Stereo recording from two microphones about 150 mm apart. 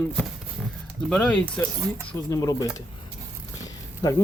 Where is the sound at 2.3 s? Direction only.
20° left (ahead or behind).